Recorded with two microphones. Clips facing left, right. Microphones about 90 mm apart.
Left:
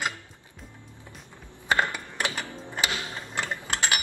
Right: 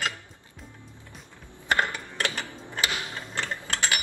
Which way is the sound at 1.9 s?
15° left (ahead or behind).